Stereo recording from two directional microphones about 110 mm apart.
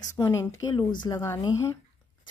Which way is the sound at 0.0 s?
35° left (ahead or behind).